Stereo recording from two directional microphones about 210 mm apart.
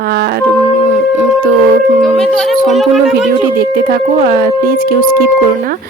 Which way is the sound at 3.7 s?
45° right (ahead or behind).